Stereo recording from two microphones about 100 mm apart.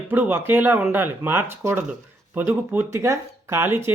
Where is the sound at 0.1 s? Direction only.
20° right (ahead or behind).